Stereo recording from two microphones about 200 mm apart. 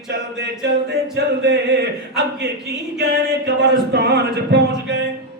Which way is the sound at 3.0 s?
60° right (ahead or behind).